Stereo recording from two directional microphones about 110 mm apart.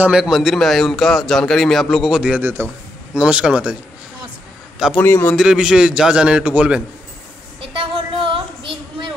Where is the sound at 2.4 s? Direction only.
20° right (ahead or behind).